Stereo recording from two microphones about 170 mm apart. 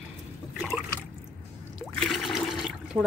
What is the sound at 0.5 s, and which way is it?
Liquid, 5° right (ahead or behind).